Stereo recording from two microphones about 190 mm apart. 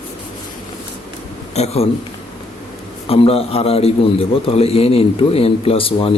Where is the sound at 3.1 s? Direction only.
30° left (ahead or behind).